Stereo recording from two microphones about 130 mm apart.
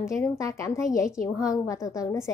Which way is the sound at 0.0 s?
25° left (ahead or behind).